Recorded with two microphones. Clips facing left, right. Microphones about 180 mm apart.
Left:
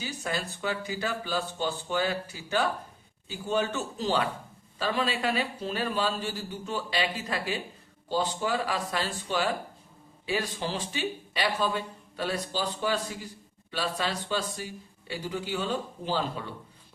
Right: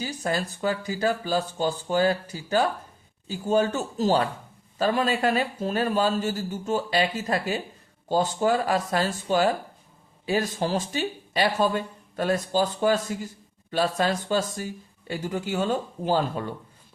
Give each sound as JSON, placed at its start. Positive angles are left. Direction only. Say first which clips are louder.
{"t": 0.0, "sound": "speech", "louder": "right 5 dB", "side_deg": -40}